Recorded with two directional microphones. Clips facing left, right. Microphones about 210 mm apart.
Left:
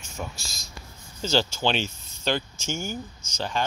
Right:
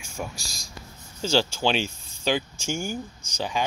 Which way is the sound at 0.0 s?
10° right (ahead or behind).